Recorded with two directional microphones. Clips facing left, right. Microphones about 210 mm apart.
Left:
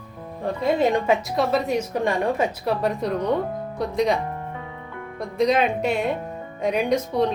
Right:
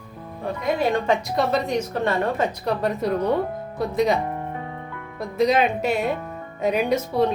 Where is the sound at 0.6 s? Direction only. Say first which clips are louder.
Left 2 dB; 25° left (ahead or behind).